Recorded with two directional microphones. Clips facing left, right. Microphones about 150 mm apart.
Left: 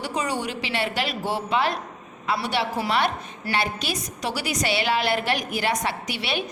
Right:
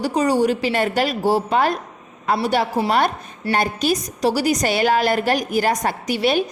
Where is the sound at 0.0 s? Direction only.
40° right (ahead or behind).